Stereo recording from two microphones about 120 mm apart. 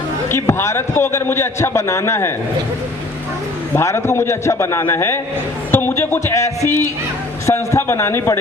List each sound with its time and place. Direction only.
0.3 s a man's voice: 20° left (ahead or behind)
3.8 s a man's voice: 20° left (ahead or behind)